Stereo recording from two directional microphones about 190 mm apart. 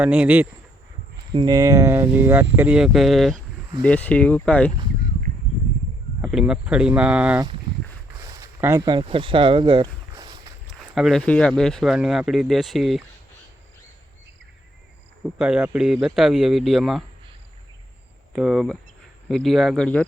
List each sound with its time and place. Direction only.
0.0 s speech: 5° right (ahead or behind)
1.3 s speech: 20° right (ahead or behind); by 4.7 s 5° left (ahead or behind)
6.2 s speech: 5° right (ahead or behind)
8.2 s speech: 15° right (ahead or behind)
10.7 s speech: centre (ahead or behind)
15.2 s speech: 5° right (ahead or behind)
18.3 s speech: centre (ahead or behind)